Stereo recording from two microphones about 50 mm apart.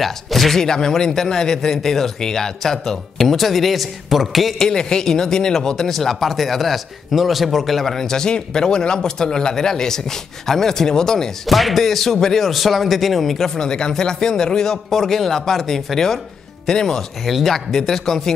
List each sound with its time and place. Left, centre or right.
0.0 s speech: centre
4.6 s speech: centre
11.4 s speech: centre
13.6 s speech: centre